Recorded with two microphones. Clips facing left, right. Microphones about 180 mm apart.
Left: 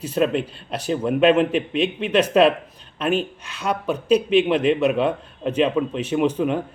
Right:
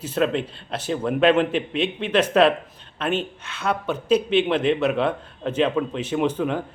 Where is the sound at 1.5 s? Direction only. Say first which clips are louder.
Left 2 dB; 30° right (ahead or behind).